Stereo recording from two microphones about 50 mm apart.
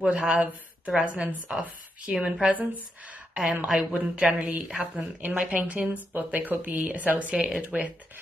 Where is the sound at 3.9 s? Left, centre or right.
Right.